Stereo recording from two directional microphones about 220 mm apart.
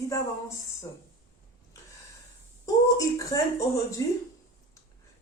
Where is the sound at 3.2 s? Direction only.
15° left (ahead or behind).